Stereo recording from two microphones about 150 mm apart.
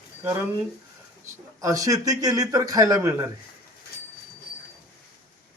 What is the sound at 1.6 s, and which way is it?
Speech, 20° right (ahead or behind).